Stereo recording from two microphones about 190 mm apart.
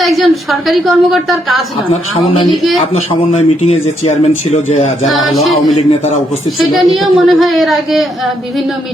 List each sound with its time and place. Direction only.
0.0 s a woman's voice: centre (ahead or behind)
2.3 s speech: 25° left (ahead or behind)
5.0 s a woman's voice: centre (ahead or behind)